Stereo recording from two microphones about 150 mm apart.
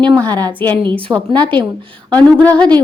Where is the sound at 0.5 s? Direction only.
10° left (ahead or behind).